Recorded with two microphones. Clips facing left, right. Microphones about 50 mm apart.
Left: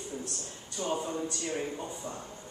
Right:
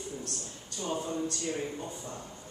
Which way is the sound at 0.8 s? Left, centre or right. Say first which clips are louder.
Left 2 dB; centre.